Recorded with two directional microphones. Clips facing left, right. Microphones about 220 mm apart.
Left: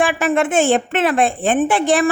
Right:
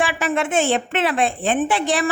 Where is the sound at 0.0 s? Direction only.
50° left (ahead or behind).